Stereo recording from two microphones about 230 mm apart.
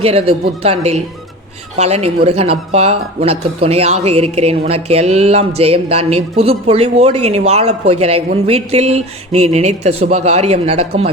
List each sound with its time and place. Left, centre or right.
0.0 s speech: right